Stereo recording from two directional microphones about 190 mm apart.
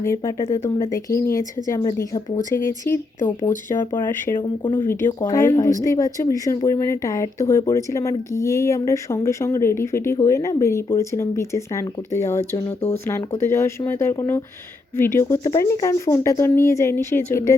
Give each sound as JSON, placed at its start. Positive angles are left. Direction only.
{"t": 0.0, "sound": "speech", "side_deg": 15}
{"t": 4.6, "sound": "speech", "side_deg": 25}
{"t": 4.9, "sound": "speech", "side_deg": 10}